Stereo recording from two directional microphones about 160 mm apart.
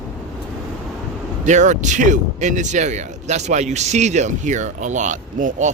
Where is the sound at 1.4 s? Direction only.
50° right (ahead or behind).